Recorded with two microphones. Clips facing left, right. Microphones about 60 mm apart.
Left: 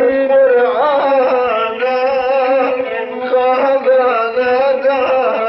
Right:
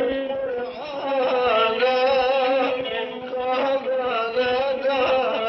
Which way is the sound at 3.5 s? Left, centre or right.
Left.